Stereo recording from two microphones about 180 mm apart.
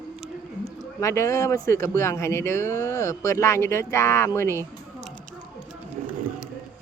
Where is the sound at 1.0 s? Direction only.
15° left (ahead or behind).